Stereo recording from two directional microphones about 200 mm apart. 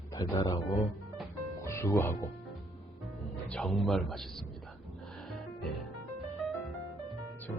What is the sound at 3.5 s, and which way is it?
Speech, 5° left (ahead or behind).